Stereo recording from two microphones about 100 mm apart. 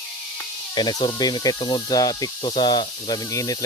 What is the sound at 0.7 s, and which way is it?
Speech, 50° left (ahead or behind).